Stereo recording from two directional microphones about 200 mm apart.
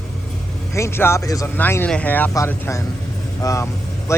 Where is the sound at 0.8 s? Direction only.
10° left (ahead or behind).